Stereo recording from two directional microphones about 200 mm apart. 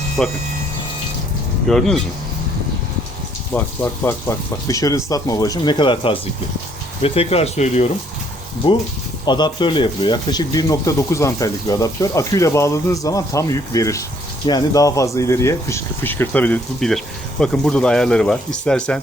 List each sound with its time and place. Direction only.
0.2 s speech: 5° left (ahead or behind)
1.6 s speech: centre (ahead or behind)
3.5 s speech: 5° left (ahead or behind)
4.0 s speech: 15° left (ahead or behind)